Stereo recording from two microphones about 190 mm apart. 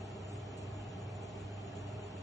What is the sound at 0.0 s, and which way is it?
Vehicle, 20° left (ahead or behind).